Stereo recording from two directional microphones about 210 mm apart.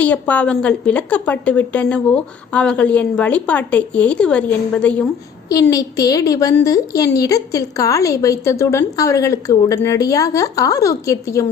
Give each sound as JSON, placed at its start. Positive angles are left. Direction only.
{"t": 0.0, "sound": "a woman's voice", "side_deg": 5}
{"t": 5.7, "sound": "a woman's voice", "side_deg": 15}